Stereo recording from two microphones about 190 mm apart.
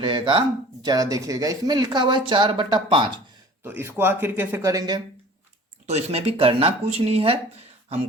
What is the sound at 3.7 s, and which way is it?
Speech, 10° right (ahead or behind).